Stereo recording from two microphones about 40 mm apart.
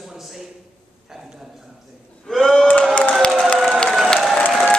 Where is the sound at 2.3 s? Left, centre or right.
Centre.